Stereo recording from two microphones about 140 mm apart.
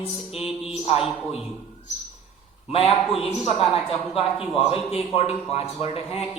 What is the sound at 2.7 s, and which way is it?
A man's voice, 45° left (ahead or behind).